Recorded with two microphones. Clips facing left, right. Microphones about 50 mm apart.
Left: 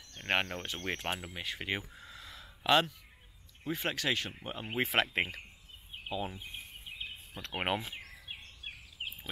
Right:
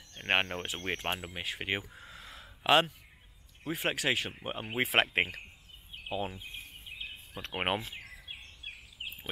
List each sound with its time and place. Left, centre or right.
0.1 s speech: centre
1.9 s a sound: centre
3.6 s speech: centre
4.6 s speech: centre
6.0 s speech: centre
6.3 s speech: centre
7.8 s a sound: centre